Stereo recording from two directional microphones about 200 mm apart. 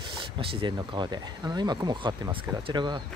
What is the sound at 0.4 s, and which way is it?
Speech, 25° right (ahead or behind).